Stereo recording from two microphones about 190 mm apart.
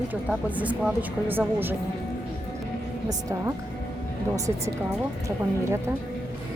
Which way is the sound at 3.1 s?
15° right (ahead or behind).